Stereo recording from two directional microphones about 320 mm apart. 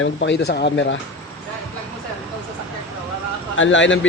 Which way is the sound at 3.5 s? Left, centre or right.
Left.